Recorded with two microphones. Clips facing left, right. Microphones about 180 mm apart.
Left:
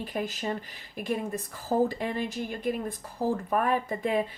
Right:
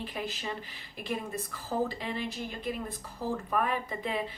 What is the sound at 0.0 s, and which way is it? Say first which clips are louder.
A woman's voice: left 5 dB; 45° left (ahead or behind).